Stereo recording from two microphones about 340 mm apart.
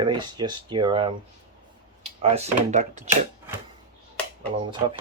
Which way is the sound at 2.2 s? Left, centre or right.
Centre.